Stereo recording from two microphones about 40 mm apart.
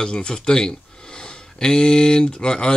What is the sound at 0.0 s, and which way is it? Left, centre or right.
Speech, centre.